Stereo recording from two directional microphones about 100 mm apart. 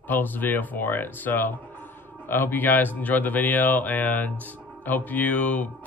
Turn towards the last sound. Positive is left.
turn(degrees=15)  # may be behind; listen again after turning